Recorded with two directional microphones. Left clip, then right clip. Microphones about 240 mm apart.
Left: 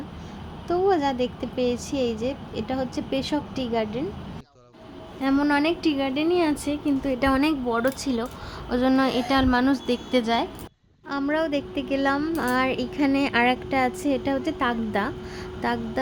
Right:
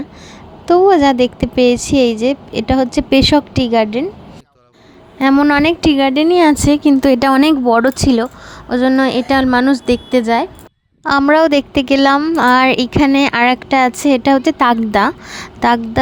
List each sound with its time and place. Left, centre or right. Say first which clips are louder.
0.7 s a woman's voice: right 13 dB; right
5.2 s a woman's voice: right 11 dB; right
11.0 s a woman's voice: right 15 dB; right